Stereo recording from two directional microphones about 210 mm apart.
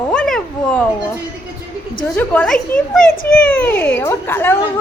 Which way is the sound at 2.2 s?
10° left (ahead or behind).